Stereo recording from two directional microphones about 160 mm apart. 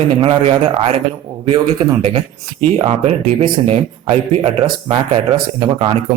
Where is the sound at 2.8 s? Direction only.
45° right (ahead or behind).